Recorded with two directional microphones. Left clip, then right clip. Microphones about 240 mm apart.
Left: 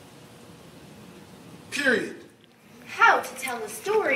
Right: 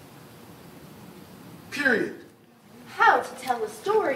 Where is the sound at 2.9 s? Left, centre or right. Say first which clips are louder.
Even; centre.